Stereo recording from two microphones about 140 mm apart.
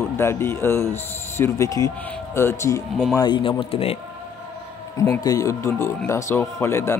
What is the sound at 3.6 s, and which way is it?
Speech, 45° left (ahead or behind).